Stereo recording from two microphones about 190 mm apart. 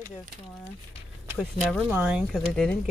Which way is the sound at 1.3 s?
Centre (ahead or behind).